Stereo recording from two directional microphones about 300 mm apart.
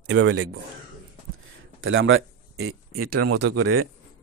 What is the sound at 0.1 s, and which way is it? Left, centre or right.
Speech, right.